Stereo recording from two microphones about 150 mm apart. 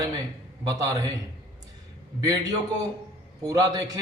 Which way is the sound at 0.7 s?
25° right (ahead or behind).